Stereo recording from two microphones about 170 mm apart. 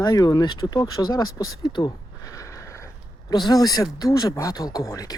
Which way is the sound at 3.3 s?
25° left (ahead or behind).